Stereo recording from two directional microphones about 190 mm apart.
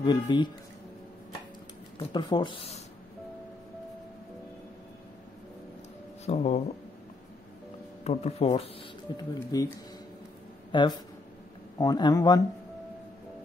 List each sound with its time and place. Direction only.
0.0 s speech: 25° left (ahead or behind)
2.0 s speech: 25° left (ahead or behind)
6.2 s speech: 35° left (ahead or behind)
8.0 s speech: 35° left (ahead or behind)
9.1 s speech: 20° left (ahead or behind)
10.7 s speech: 25° left (ahead or behind)